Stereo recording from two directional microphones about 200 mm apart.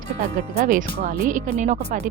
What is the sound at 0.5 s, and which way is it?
Speech, 35° right (ahead or behind).